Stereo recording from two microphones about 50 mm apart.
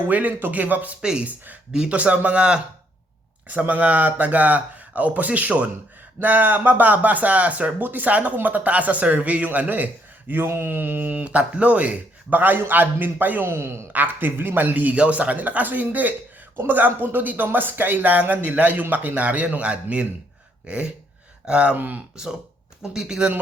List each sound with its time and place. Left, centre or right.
0.1 s speech: right
1.7 s speech: centre
2.0 s a man's voice: right
6.1 s speech: right
10.4 s speech: right
13.5 s a man's voice: right
13.9 s a man's voice: right
21.8 s speech: right
22.1 s speech: centre